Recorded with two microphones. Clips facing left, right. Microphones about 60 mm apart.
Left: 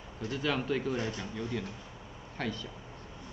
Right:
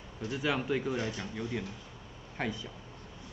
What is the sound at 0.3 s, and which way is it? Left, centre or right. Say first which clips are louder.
Speech: even; centre.